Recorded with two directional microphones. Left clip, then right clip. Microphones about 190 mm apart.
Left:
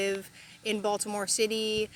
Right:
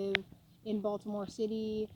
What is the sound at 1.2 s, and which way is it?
Speech, 5° right (ahead or behind).